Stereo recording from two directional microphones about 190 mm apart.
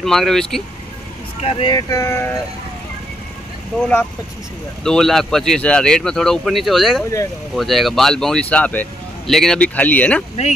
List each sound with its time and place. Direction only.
0.0 s speech: centre (ahead or behind)
1.4 s speech: 25° left (ahead or behind)
3.8 s speech: 5° left (ahead or behind)